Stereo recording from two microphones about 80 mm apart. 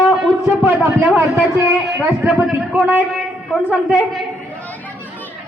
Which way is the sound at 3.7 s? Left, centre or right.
Centre.